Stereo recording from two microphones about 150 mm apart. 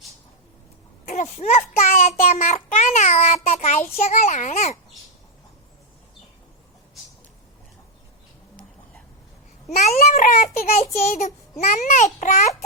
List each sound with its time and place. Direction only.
1.0 s a sound: 55° left (ahead or behind)
1.9 s child singing: 50° left (ahead or behind)
9.7 s child singing: 45° left (ahead or behind)